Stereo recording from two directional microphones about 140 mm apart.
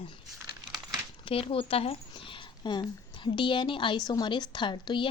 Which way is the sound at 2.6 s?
30° left (ahead or behind).